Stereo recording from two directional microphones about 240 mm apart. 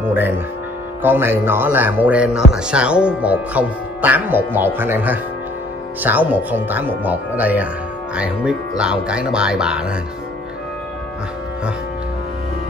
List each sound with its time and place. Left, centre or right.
0.0 s speech: centre